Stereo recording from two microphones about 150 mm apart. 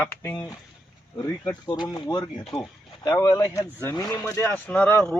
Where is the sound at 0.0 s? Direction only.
15° left (ahead or behind).